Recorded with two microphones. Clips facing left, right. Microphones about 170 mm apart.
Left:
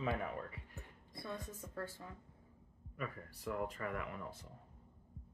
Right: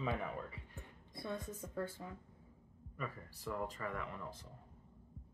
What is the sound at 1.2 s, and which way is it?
Speech, 20° right (ahead or behind).